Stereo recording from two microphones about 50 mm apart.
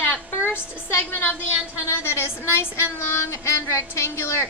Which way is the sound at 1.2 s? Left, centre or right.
Left.